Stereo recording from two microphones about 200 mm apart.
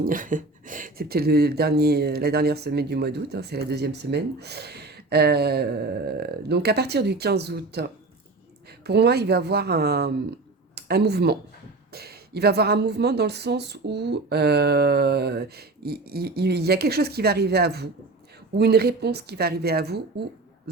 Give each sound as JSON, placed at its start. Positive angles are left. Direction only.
{"t": 0.0, "sound": "speech", "side_deg": -45}